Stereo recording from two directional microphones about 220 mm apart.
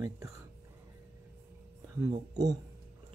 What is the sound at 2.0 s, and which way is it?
Speech, 15° right (ahead or behind).